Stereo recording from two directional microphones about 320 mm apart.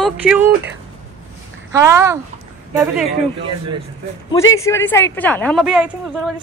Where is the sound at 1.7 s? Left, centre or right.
Centre.